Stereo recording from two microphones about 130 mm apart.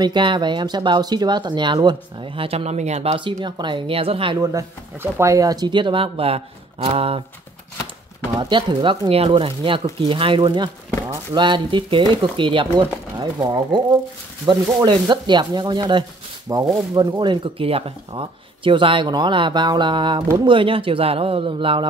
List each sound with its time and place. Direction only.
0.0 s speech: 35° right (ahead or behind); by 3.2 s 55° right (ahead or behind)
3.3 s speech: 35° right (ahead or behind)
4.4 s speech: 25° right (ahead or behind); by 7.2 s 45° right (ahead or behind)
8.4 s speech: 35° right (ahead or behind)